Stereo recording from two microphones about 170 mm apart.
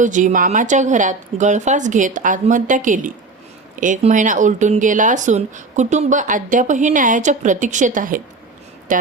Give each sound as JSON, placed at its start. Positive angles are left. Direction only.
{"t": 0.0, "sound": "speech", "side_deg": -45}